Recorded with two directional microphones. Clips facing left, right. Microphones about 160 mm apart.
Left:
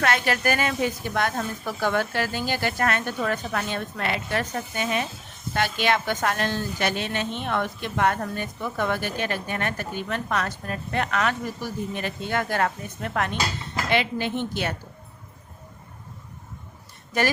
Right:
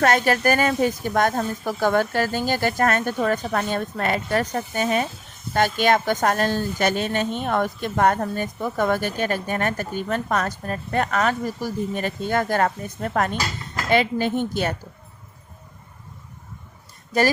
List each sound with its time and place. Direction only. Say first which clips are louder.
0.0 s a woman's voice: right 5 dB; 40° right (ahead or behind)